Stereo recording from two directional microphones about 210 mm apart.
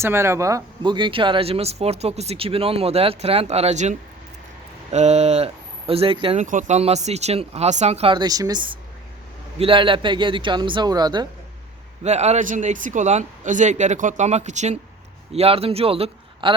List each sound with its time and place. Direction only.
0.0 s speech: 10° right (ahead or behind)
6.4 s speech: 35° right (ahead or behind); by 11.3 s 20° right (ahead or behind)
12.0 s speech: 30° right (ahead or behind)